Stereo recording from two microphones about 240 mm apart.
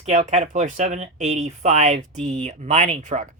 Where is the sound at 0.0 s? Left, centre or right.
Right.